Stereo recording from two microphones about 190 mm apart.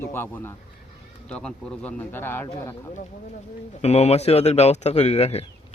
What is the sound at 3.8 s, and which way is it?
A man's voice, 35° left (ahead or behind).